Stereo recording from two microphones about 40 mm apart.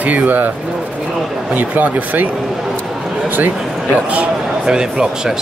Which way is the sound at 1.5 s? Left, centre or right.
Right.